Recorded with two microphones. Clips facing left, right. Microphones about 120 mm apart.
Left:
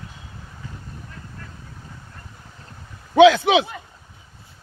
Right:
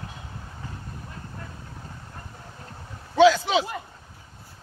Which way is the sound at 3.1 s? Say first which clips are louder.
Left 5 dB; 65° left (ahead or behind).